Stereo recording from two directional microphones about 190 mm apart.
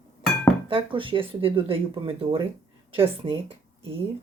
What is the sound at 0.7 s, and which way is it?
Speech, 25° right (ahead or behind).